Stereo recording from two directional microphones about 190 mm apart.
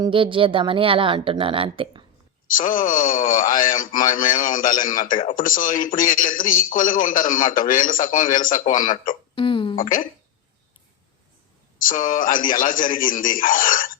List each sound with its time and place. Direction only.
0.0 s speech: 25° right (ahead or behind)
2.5 s a man's voice: 45° left (ahead or behind)
9.3 s hiccup: 25° left (ahead or behind)
9.7 s a man's voice: 45° left (ahead or behind)
11.8 s a man's voice: 45° left (ahead or behind)